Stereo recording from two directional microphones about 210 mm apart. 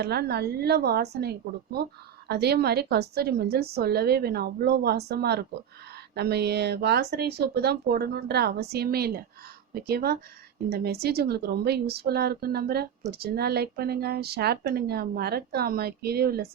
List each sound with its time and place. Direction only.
0.0 s a woman's voice: 50° right (ahead or behind)